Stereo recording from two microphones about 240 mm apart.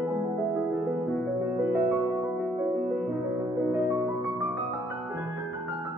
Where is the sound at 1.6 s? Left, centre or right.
Centre.